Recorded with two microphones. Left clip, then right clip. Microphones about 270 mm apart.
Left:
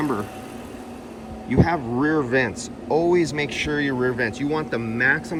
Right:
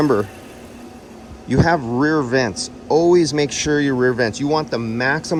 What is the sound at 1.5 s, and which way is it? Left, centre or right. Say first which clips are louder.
Speech: right 5 dB; centre.